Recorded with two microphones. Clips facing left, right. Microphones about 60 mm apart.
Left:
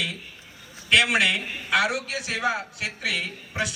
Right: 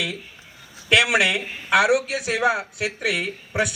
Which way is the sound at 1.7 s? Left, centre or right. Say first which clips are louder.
Right 6 dB; right.